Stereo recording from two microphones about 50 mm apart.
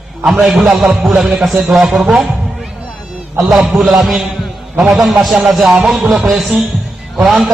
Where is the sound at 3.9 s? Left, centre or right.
Centre.